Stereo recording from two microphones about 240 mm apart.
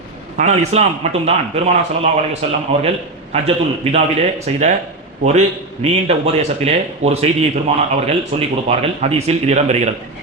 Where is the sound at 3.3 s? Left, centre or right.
Right.